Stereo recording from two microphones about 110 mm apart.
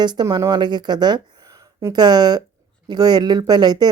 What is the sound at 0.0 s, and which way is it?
A woman's voice, 40° right (ahead or behind).